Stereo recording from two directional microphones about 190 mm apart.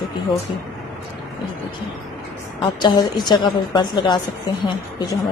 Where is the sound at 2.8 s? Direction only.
20° left (ahead or behind).